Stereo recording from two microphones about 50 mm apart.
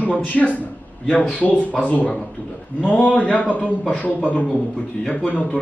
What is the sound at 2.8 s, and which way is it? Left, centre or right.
A man's voice, left.